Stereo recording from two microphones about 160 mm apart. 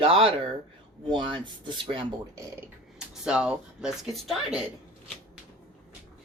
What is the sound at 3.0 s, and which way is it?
Speech, 5° right (ahead or behind).